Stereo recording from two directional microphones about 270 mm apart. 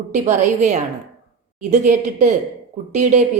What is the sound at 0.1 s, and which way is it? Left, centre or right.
A woman's voice, right.